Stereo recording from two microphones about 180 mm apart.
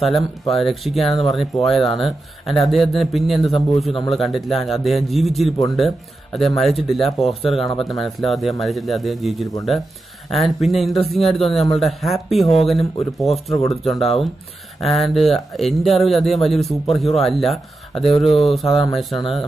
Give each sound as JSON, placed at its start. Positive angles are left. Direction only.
{"t": 0.0, "sound": "speech", "side_deg": 0}
{"t": 13.3, "sound": "speech", "side_deg": 35}
{"t": 13.7, "sound": "speech", "side_deg": 0}